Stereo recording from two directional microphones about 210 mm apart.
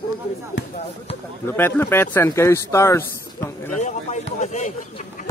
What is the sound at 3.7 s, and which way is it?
Speech, 35° left (ahead or behind).